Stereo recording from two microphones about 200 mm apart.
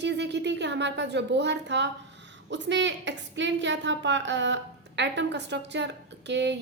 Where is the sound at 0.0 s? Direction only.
60° right (ahead or behind).